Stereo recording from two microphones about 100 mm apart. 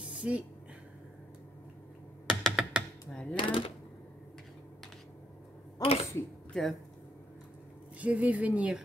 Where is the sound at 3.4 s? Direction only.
60° left (ahead or behind).